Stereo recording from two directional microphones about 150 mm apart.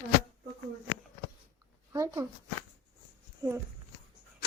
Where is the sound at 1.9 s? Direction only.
25° right (ahead or behind).